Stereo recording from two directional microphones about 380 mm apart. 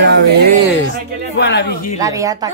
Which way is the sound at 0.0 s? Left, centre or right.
Right.